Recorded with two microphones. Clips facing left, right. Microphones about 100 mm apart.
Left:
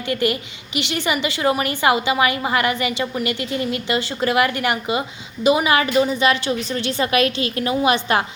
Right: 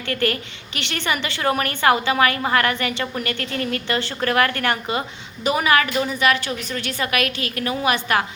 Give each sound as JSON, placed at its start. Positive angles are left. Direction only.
{"t": 0.1, "sound": "a woman's voice", "side_deg": 15}